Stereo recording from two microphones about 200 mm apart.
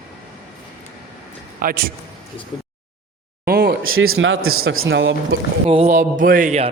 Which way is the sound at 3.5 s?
50° right (ahead or behind).